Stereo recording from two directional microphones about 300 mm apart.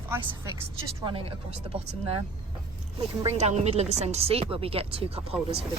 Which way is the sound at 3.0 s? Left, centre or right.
Right.